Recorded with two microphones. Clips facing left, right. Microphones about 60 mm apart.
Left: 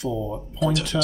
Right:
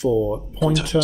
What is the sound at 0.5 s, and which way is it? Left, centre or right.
Speech, centre.